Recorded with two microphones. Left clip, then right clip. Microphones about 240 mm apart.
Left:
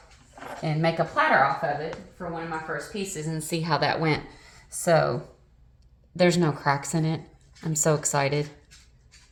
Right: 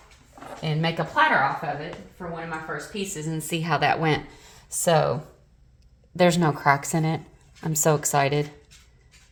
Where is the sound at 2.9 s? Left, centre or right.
Centre.